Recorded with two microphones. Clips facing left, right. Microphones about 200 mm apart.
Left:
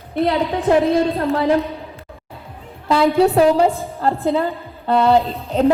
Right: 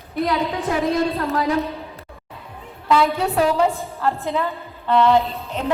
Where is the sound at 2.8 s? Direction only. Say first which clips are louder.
Left 5 dB; 30° left (ahead or behind).